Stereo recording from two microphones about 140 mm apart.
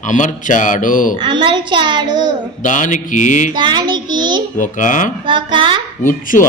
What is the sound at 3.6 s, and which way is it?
Speech, 35° right (ahead or behind).